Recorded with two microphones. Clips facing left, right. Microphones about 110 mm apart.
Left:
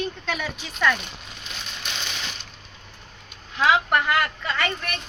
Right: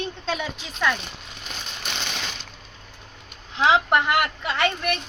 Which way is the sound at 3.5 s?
25° right (ahead or behind).